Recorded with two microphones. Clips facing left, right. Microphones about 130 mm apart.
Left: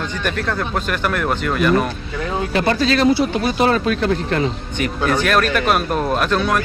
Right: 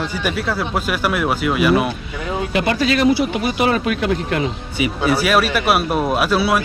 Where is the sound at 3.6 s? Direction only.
35° left (ahead or behind).